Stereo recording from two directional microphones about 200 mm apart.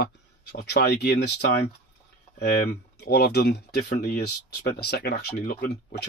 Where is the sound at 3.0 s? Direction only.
55° left (ahead or behind).